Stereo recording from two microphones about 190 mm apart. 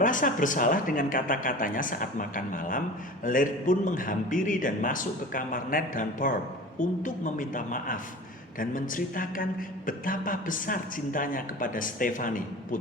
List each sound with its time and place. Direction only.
0.0 s speech: 45° left (ahead or behind)